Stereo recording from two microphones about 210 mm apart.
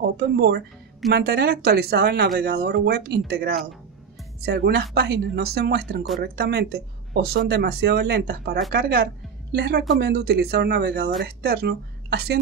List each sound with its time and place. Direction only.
0.0 s a woman's voice: 50° right (ahead or behind)